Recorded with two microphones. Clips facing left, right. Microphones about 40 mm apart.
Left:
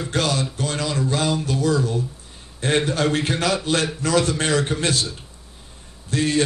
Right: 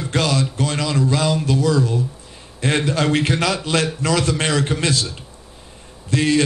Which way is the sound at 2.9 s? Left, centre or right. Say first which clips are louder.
Right 3 dB; right.